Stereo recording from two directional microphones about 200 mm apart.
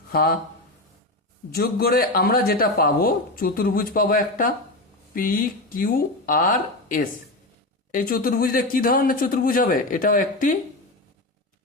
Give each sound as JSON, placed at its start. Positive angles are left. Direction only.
{"t": 0.1, "sound": "speech", "side_deg": 50}
{"t": 1.5, "sound": "a man's voice", "side_deg": 50}